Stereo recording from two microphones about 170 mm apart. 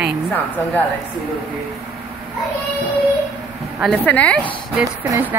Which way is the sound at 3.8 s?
5° left (ahead or behind).